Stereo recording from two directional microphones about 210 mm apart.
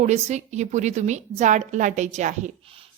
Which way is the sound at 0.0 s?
35° right (ahead or behind).